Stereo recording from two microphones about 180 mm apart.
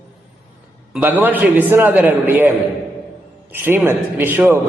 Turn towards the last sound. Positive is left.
turn(degrees=-10)  # may be behind; listen again after turning